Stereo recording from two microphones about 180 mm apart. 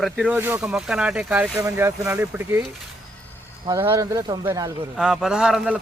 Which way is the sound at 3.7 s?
15° right (ahead or behind).